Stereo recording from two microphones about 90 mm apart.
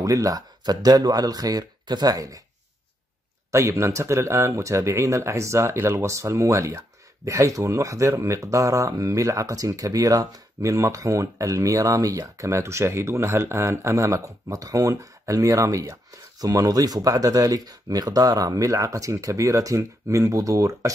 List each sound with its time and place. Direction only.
0.0 s speech: 40° right (ahead or behind)
3.5 s speech: 30° right (ahead or behind)